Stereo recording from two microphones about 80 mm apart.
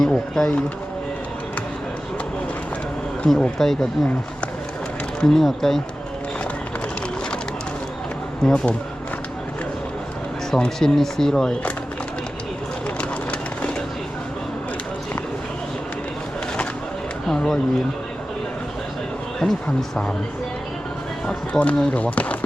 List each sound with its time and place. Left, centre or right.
0.0 s speech: centre
3.2 s speech: centre
5.2 s speech: centre
8.4 s speech: centre
10.5 s speech: centre
17.2 s speech: centre
19.4 s speech: centre
21.2 s speech: centre